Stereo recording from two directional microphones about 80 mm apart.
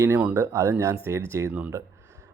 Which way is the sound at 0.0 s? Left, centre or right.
Right.